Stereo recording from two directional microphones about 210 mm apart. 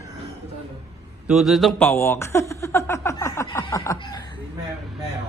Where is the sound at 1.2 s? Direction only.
Centre (ahead or behind); by 4.2 s 20° left (ahead or behind).